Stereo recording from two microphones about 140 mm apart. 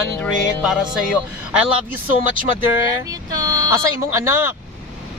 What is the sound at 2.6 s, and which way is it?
Speech, 25° right (ahead or behind).